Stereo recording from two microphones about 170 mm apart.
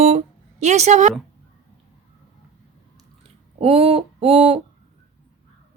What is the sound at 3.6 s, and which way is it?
Speech, 35° right (ahead or behind).